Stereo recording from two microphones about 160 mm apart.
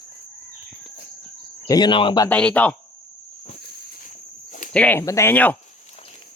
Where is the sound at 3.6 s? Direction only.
85° left.